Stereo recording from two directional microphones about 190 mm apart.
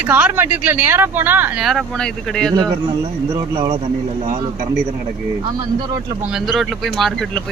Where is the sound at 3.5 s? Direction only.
25° right (ahead or behind).